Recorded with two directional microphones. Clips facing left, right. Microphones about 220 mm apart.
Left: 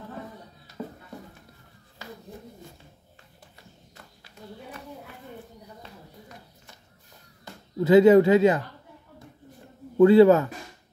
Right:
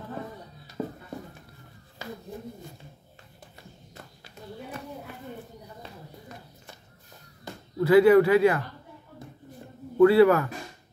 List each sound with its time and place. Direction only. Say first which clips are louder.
0.8 s a sound: right 4 dB; 25° right (ahead or behind)
7.8 s speech: left 2 dB; 20° left (ahead or behind)
9.9 s speech: left 2 dB; 25° left (ahead or behind)